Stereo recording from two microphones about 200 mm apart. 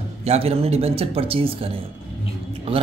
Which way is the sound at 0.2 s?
30° right (ahead or behind).